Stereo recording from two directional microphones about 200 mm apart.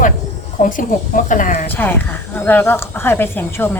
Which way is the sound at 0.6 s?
40° left (ahead or behind).